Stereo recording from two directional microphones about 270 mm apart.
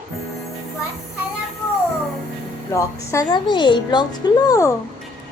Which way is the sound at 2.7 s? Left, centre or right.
Centre.